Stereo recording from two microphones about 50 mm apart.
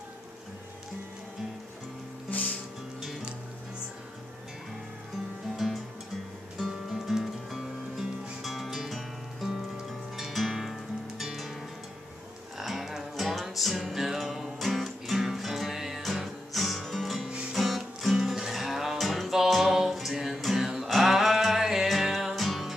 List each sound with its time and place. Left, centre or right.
6.6 s music: centre
12.5 s music: centre
17.3 s music: centre
17.6 s music: centre